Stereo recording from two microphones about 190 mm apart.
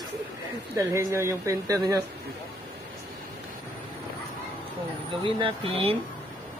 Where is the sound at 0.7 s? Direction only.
15° right (ahead or behind).